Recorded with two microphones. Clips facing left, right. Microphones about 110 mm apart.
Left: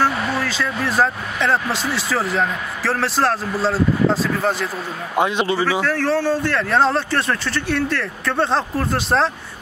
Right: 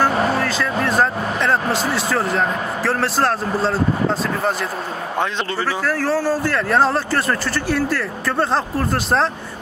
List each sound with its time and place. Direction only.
0.1 s vehicle: 40° right (ahead or behind)
0.4 s speech: centre (ahead or behind)
5.1 s speech: 10° left (ahead or behind)
5.7 s speech: centre (ahead or behind)